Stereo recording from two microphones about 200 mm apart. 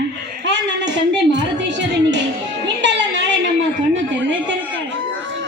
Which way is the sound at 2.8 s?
60° right (ahead or behind).